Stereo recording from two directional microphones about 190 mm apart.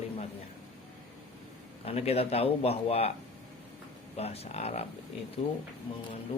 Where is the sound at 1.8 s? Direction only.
30° left (ahead or behind).